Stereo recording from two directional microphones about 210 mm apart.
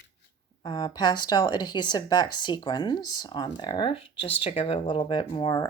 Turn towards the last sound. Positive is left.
turn(degrees=20)  # may be behind; listen again after turning